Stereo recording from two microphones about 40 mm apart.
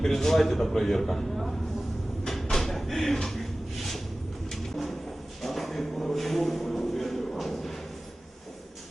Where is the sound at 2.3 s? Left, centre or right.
Centre.